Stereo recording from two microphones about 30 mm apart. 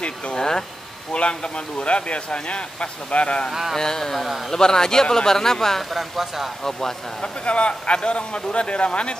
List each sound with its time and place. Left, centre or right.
0.4 s a man's voice: left
1.1 s speech: left
3.7 s a man's voice: centre
5.9 s speech: centre
7.2 s speech: left